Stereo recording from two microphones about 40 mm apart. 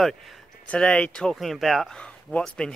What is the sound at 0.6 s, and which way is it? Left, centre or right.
Speech, left.